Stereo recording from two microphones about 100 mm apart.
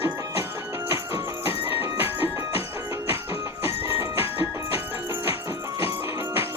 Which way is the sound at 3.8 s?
25° right (ahead or behind).